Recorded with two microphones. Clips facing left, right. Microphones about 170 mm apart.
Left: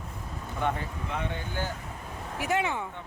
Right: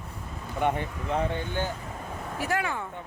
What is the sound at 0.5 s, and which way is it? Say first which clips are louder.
Speech: right 4 dB; 20° right (ahead or behind).